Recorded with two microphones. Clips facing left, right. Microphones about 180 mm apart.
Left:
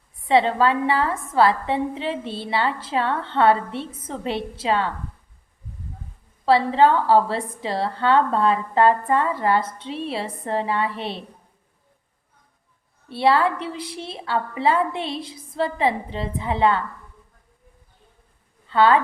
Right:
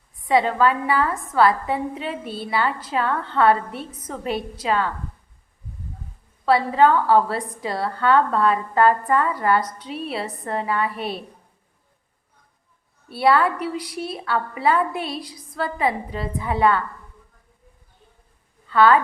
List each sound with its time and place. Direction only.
0.3 s a woman's voice: 25° left (ahead or behind)
6.4 s a woman's voice: 25° left (ahead or behind)
13.1 s a woman's voice: 25° left (ahead or behind)
18.7 s a woman's voice: 25° left (ahead or behind)